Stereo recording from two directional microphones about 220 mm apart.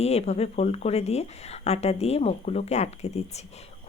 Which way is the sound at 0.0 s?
30° left (ahead or behind).